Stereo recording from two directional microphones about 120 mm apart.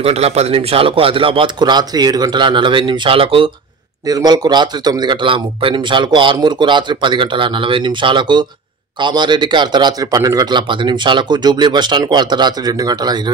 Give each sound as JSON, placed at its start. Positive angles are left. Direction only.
{"t": 0.0, "sound": "speech", "side_deg": -60}
{"t": 4.1, "sound": "a man's voice", "side_deg": -35}